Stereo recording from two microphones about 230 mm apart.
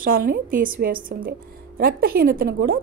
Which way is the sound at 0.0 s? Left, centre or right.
Right.